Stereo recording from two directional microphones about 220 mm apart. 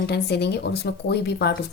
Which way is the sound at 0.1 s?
50° left (ahead or behind).